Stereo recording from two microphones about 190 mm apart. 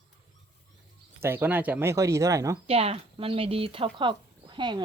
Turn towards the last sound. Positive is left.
turn(degrees=-25)  # may be behind; listen again after turning